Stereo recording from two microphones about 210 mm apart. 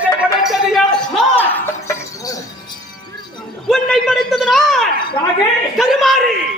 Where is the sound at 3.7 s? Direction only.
Centre (ahead or behind).